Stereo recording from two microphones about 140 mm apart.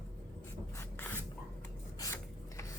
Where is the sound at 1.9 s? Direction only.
25° left (ahead or behind).